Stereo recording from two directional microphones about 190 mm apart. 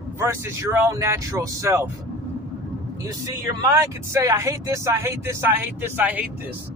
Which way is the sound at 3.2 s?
15° right (ahead or behind).